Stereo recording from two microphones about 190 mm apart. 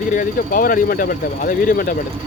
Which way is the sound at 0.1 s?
45° left (ahead or behind).